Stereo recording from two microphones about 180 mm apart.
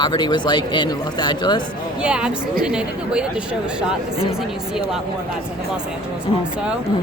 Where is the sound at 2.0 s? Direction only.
5° right (ahead or behind).